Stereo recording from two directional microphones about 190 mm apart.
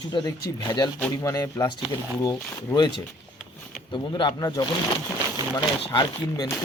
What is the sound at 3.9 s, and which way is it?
Speech, 25° left (ahead or behind).